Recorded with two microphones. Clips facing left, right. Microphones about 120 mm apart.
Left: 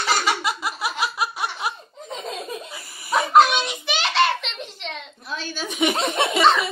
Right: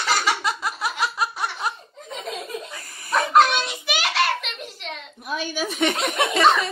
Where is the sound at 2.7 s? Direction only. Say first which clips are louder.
Left 3 dB; 10° left (ahead or behind); by 5.6 s 10° right (ahead or behind).